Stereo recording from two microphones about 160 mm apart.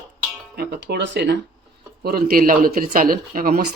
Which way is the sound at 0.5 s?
85° right.